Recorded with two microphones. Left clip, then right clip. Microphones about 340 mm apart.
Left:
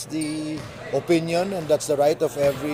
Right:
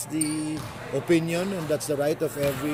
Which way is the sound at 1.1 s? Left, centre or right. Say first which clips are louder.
Left 2 dB; centre.